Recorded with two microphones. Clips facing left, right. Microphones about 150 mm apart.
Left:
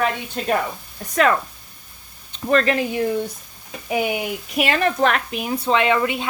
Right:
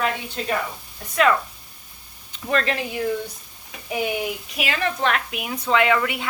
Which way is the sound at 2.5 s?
40° left (ahead or behind).